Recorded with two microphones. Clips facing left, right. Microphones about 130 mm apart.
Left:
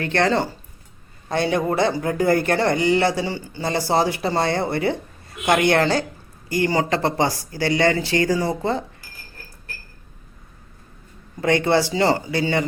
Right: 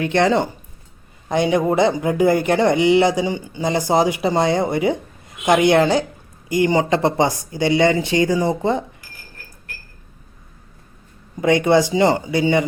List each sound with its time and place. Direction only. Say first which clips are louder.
0.0 s speech: right 3 dB; 15° right (ahead or behind)
11.3 s speech: right 3 dB; 15° right (ahead or behind)